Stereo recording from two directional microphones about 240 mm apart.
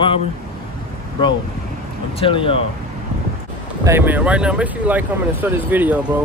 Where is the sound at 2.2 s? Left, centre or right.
Left.